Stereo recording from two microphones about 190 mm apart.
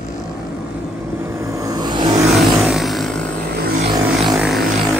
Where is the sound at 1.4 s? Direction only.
15° right (ahead or behind).